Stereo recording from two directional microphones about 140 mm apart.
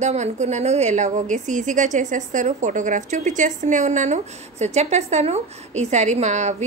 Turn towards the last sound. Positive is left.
turn(degrees=-55)  # may be behind; listen again after turning